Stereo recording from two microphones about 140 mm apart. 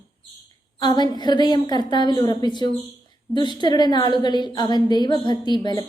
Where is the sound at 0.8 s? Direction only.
30° left (ahead or behind).